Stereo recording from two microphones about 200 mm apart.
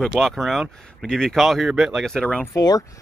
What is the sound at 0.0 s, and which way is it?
Speech, centre (ahead or behind).